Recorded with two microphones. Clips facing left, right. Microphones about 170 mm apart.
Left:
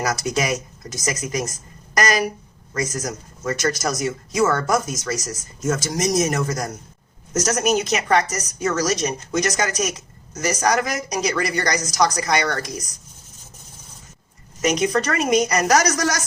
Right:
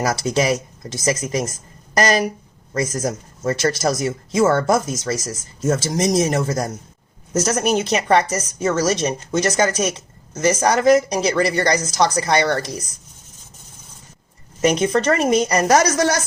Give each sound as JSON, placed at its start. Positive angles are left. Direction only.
{"t": 0.1, "sound": "a woman's voice", "side_deg": -30}
{"t": 14.6, "sound": "a woman's voice", "side_deg": -30}